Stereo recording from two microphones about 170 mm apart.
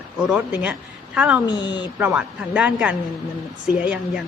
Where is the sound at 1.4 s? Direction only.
25° left (ahead or behind).